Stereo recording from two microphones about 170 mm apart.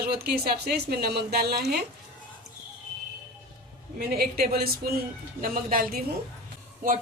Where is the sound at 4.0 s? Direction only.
65° right (ahead or behind).